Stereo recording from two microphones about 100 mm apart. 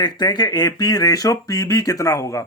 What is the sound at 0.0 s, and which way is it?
Speech, 45° left (ahead or behind).